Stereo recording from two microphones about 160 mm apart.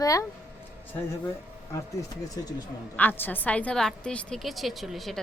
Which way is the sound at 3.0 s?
10° left (ahead or behind).